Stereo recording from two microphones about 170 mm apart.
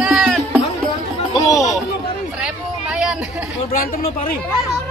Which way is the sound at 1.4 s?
20° left (ahead or behind).